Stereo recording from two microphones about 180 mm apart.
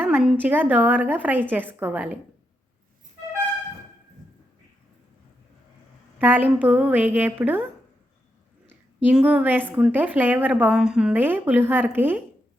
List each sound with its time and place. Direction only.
0.0 s a woman's voice: 5° right (ahead or behind)
6.1 s a woman's voice: 10° right (ahead or behind)
9.0 s a woman's voice: 10° right (ahead or behind)